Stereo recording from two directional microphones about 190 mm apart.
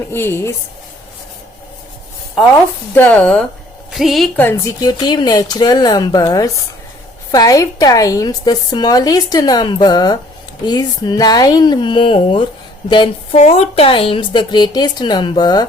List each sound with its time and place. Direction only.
0.1 s speech: 10° left (ahead or behind)
2.9 s a woman's voice: 10° left (ahead or behind)
4.4 s speech: 20° left (ahead or behind)